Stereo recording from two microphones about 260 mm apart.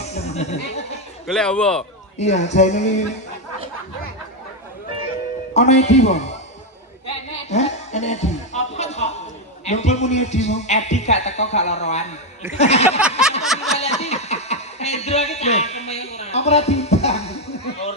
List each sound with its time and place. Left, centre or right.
0.0 s music: left
1.3 s a man's voice: centre
2.1 s a man's voice: left
5.5 s a man's voice: left
7.5 s music: left
9.6 s a man's voice: left
13.0 s a man's voice: centre
13.7 s a sound: left